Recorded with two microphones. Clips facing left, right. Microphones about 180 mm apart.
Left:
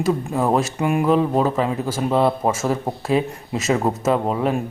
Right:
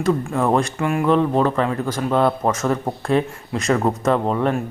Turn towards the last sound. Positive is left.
turn(degrees=10)  # may be behind; listen again after turning